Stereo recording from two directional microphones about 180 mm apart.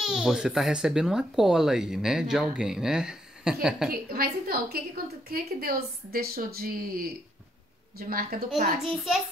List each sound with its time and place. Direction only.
0.0 s speech: centre (ahead or behind)
3.9 s a woman's voice: 55° right (ahead or behind)
8.1 s a woman's voice: 55° right (ahead or behind)
8.8 s speech: centre (ahead or behind)